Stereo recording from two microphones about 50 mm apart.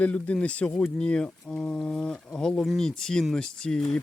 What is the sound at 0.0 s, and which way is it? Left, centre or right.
Speech, left.